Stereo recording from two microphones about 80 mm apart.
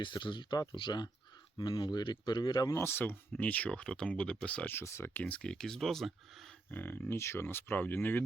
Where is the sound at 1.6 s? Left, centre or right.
Left.